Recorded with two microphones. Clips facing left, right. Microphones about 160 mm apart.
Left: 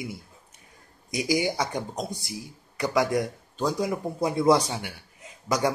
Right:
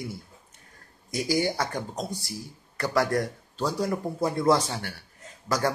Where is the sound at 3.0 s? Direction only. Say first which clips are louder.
Even; 5° left (ahead or behind).